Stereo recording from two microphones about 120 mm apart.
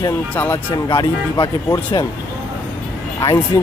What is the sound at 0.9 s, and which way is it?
Speech, 40° left (ahead or behind).